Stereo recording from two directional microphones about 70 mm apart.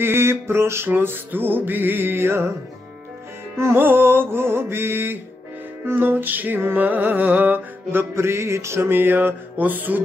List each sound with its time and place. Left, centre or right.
0.0 s music: right
3.5 s music: right